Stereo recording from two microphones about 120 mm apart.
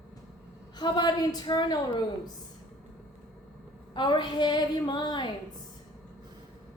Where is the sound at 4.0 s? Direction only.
40° left (ahead or behind).